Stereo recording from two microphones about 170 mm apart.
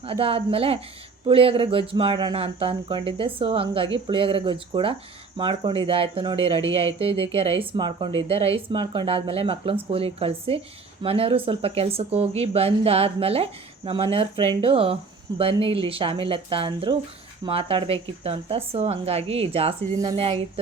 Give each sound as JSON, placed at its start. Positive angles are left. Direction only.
{"t": 0.0, "sound": "speech", "side_deg": -35}